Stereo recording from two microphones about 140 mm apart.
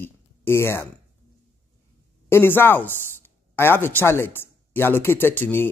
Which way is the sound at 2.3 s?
15° left (ahead or behind).